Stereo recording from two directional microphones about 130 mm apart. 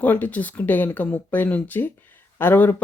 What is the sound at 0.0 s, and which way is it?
Speech, 15° left (ahead or behind).